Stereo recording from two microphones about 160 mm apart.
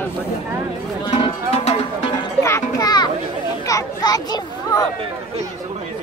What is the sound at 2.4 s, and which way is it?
Children playing, 20° left (ahead or behind).